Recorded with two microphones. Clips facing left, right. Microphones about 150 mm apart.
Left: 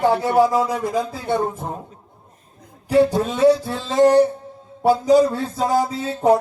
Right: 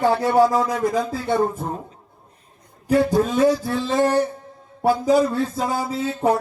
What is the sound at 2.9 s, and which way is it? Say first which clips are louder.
Music: left 1 dB; 25° left (ahead or behind).